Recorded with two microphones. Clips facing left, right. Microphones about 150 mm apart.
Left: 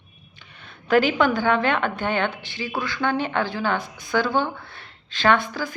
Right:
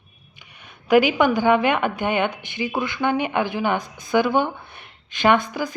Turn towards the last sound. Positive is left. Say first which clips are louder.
# right 2 dB
turn(degrees=-15)  # may be behind; listen again after turning